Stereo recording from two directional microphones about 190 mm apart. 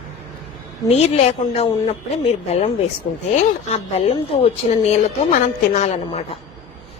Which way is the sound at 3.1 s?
30° left (ahead or behind).